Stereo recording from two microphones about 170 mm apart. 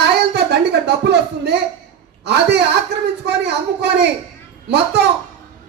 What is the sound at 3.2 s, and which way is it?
Speech, 80° right.